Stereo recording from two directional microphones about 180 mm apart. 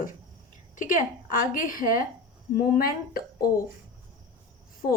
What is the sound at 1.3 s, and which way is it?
A woman's voice, 50° left (ahead or behind).